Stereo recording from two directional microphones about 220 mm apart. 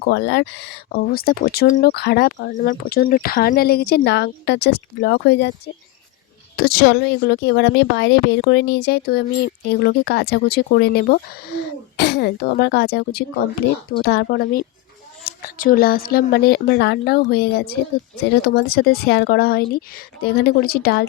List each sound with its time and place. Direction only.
0.1 s speech: 50° left (ahead or behind)